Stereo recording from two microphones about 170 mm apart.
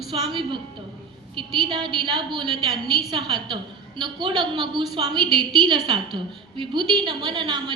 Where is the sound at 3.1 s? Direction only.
30° right (ahead or behind).